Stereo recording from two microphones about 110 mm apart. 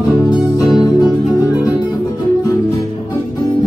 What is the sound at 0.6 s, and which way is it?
Music, 40° left (ahead or behind).